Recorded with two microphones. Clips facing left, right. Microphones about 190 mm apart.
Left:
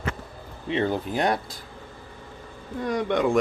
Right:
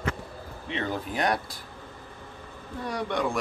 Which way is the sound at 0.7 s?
30° left (ahead or behind).